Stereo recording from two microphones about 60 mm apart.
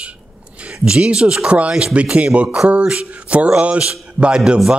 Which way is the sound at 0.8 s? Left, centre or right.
Centre.